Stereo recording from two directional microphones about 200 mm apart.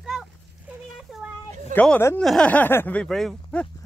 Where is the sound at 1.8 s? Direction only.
10° left (ahead or behind).